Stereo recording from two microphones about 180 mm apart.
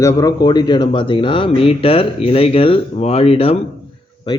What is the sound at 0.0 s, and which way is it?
Speech, 20° left (ahead or behind).